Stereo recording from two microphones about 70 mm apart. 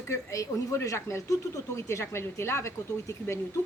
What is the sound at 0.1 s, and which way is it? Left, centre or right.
Speech, left.